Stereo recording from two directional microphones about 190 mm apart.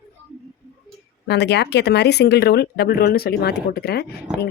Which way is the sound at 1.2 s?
60° left (ahead or behind).